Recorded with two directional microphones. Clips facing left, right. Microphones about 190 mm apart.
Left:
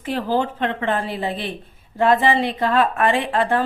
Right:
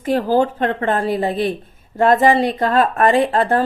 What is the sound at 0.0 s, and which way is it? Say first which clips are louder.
Speech: right 5 dB; 40° right (ahead or behind).